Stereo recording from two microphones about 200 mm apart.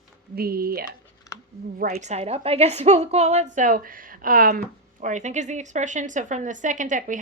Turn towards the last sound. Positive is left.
turn(degrees=-40)  # may be behind; listen again after turning